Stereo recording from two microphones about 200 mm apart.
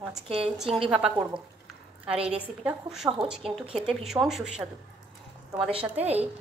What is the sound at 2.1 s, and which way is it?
Speech, 30° right (ahead or behind).